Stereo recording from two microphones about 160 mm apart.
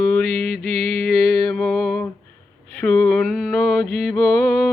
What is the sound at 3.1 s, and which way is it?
Mantra, centre (ahead or behind).